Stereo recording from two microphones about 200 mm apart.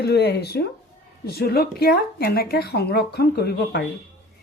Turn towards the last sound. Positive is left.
turn(degrees=55)  # may be behind; listen again after turning